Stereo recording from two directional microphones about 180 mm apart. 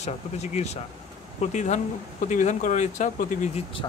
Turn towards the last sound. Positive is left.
turn(degrees=45)  # may be behind; listen again after turning